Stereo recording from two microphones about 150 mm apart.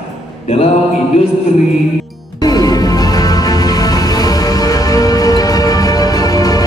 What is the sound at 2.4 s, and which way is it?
Music, 25° left (ahead or behind).